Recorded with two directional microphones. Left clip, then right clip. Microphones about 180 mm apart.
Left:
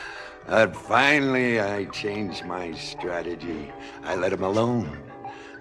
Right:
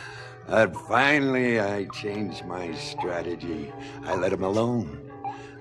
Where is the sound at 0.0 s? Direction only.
35° right (ahead or behind).